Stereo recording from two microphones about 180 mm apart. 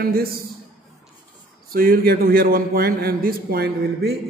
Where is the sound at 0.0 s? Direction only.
55° right (ahead or behind).